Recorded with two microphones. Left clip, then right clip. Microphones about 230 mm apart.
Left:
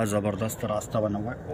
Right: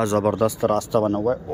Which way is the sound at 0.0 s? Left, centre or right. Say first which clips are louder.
Right 8 dB; centre.